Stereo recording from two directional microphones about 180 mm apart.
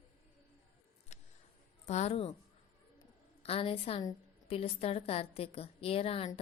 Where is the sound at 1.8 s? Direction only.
40° left (ahead or behind).